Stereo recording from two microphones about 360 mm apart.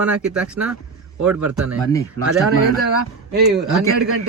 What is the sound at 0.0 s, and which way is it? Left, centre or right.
Speech, centre.